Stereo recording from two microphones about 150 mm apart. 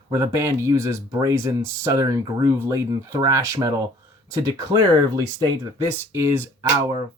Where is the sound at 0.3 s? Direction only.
20° right (ahead or behind).